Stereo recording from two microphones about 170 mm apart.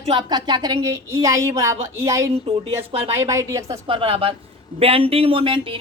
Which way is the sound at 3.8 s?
30° right (ahead or behind).